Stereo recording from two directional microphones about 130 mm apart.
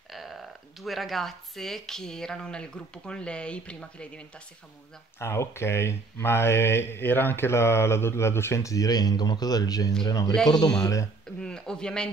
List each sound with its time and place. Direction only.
0.1 s speech: centre (ahead or behind)
5.2 s speech: 20° left (ahead or behind)
11.3 s speech: 5° left (ahead or behind)